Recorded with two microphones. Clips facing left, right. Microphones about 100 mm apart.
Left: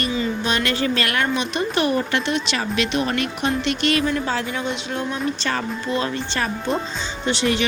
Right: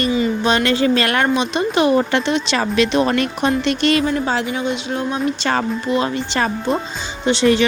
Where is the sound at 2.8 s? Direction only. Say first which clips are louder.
Right 6 dB; 40° right (ahead or behind).